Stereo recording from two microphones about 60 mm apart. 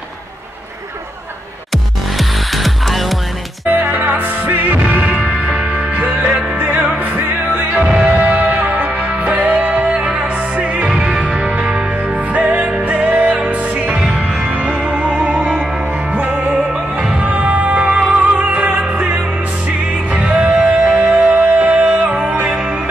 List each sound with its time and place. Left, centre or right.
1.7 s music: centre
3.6 s music: right
13.9 s music: centre
17.9 s music: centre